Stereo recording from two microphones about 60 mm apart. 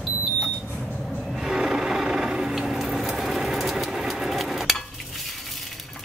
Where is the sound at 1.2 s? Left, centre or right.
Centre.